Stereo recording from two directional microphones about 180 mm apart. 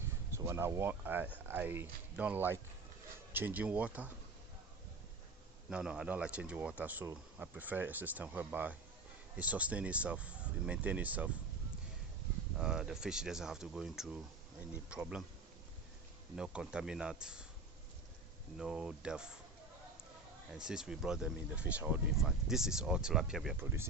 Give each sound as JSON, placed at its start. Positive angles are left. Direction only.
{"t": 0.3, "sound": "speech", "side_deg": -15}
{"t": 5.7, "sound": "speech", "side_deg": -5}
{"t": 12.5, "sound": "speech", "side_deg": -5}
{"t": 16.3, "sound": "speech", "side_deg": -5}
{"t": 18.5, "sound": "speech", "side_deg": -5}
{"t": 20.5, "sound": "speech", "side_deg": -5}
{"t": 23.6, "sound": "speech", "side_deg": -15}